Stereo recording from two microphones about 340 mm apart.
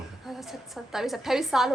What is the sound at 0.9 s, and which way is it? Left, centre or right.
Speech, centre.